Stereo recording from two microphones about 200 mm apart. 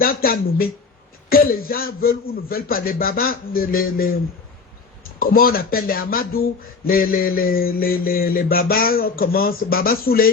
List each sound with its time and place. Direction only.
0.0 s mantra: 45° left (ahead or behind)
5.2 s mantra: 45° left (ahead or behind)